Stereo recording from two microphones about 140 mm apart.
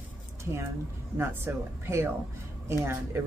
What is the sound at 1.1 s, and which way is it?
Speech, 20° right (ahead or behind).